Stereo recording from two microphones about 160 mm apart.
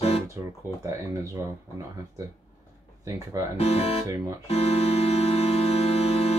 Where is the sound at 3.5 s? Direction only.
40° left (ahead or behind).